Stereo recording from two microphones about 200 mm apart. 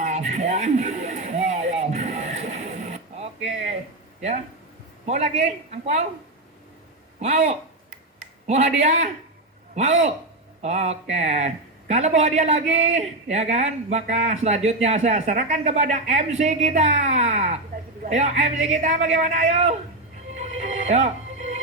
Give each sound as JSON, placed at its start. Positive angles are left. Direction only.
{"t": 0.0, "sound": "a sound", "side_deg": -35}
{"t": 5.0, "sound": "speech", "side_deg": -35}
{"t": 7.2, "sound": "speech", "side_deg": -35}
{"t": 10.6, "sound": "speech", "side_deg": -35}
{"t": 20.3, "sound": "music", "side_deg": -35}